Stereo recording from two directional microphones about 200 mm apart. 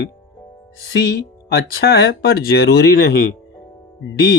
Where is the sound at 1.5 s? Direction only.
50° left (ahead or behind).